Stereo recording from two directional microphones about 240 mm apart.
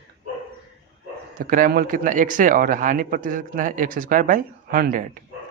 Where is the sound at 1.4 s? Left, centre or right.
Right.